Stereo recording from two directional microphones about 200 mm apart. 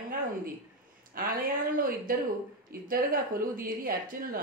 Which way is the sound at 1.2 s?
45° right (ahead or behind).